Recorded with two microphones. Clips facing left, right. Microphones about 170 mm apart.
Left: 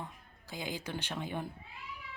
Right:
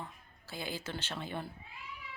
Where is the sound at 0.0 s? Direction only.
15° left (ahead or behind).